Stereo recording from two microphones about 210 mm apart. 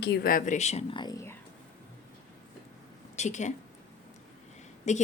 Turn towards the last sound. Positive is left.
turn(degrees=35)  # may be behind; listen again after turning